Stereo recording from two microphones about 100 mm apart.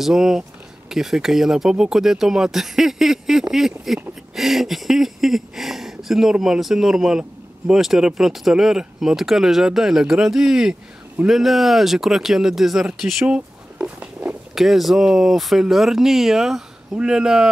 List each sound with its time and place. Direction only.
0.0 s speech: 5° right (ahead or behind)
14.5 s speech: centre (ahead or behind)